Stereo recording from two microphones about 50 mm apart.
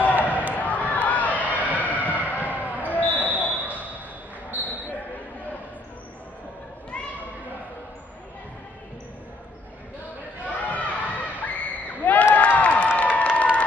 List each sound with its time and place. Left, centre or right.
0.2 s a sound: left
2.7 s basketball bounce: left
4.5 s basketball bounce: right
10.4 s chatter: left
11.4 s crowd: left